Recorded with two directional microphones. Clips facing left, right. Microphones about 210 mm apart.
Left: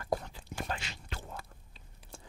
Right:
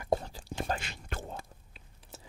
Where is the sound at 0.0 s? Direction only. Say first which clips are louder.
Right 4 dB; 25° right (ahead or behind).